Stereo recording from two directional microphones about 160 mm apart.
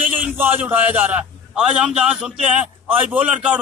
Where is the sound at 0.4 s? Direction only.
10° right (ahead or behind).